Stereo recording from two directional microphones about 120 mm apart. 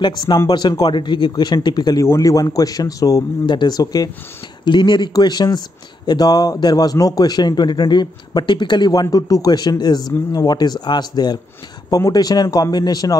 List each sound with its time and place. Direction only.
0.0 s a man's voice: 40° left (ahead or behind)